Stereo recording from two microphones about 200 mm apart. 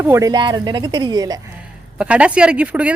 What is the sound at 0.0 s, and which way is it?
A woman's voice, 15° right (ahead or behind).